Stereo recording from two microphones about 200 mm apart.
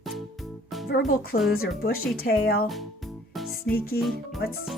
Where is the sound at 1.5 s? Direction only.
50° left (ahead or behind).